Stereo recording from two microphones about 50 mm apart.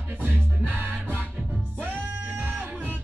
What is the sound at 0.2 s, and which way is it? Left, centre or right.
Music, right.